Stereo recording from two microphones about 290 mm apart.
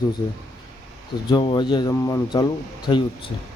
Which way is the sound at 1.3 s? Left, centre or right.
Centre.